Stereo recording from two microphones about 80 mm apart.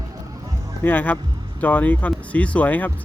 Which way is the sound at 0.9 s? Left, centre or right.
Left.